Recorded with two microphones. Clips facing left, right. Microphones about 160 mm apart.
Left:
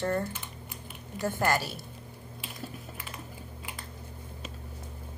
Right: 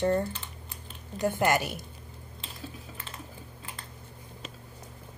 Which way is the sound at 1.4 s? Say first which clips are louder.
Right 1 dB; 20° right (ahead or behind).